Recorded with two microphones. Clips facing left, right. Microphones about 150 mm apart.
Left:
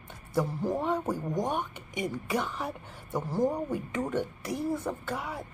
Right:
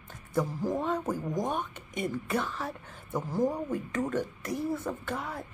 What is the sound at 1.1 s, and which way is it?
Speech, centre (ahead or behind).